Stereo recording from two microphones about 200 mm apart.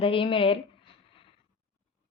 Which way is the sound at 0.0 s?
30° left (ahead or behind).